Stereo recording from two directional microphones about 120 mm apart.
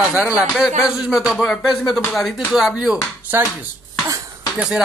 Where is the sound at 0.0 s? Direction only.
10° right (ahead or behind).